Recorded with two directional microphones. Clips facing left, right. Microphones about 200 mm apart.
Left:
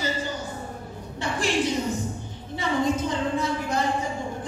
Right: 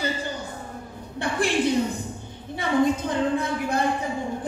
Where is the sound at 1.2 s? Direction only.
55° right (ahead or behind).